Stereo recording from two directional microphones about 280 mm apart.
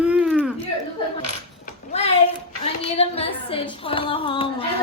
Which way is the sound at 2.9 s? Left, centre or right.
Left.